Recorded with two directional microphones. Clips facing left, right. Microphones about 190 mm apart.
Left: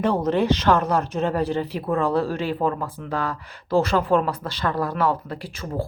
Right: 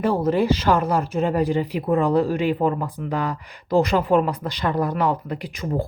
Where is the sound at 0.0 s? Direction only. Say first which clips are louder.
Right 1 dB; 10° right (ahead or behind).